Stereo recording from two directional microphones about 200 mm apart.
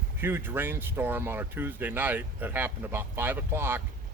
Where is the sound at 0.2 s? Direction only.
10° right (ahead or behind).